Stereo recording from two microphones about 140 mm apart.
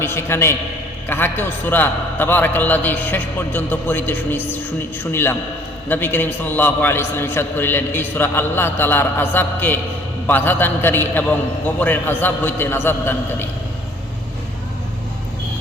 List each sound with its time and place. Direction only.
0.0 s a man's voice: 15° left (ahead or behind)